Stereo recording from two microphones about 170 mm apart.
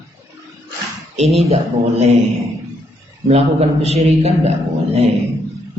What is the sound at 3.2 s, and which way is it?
A man's voice, 40° right (ahead or behind).